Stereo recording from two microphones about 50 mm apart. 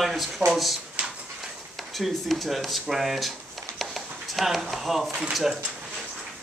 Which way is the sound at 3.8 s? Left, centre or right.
Centre.